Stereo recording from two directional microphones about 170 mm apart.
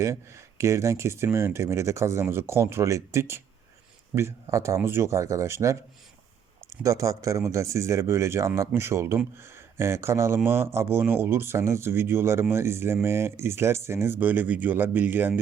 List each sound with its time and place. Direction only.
0.0 s speech: 15° right (ahead or behind)
6.8 s speech: 20° right (ahead or behind)